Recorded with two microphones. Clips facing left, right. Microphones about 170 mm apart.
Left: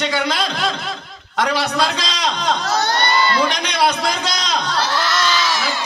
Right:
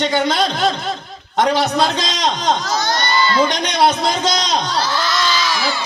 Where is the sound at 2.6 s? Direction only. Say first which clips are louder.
Left 1 dB; 65° left (ahead or behind).